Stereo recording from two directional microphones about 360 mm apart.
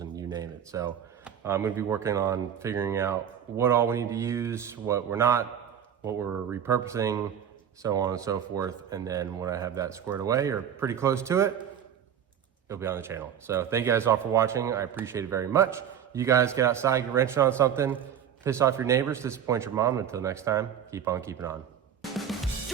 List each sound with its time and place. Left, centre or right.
0.0 s speech: centre
12.6 s speech: centre